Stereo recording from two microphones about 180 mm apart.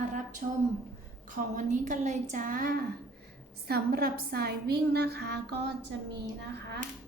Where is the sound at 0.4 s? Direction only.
45° right (ahead or behind); by 5.7 s 65° right (ahead or behind).